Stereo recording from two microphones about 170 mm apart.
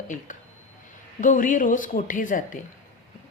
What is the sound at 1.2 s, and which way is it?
Speech, 50° left (ahead or behind).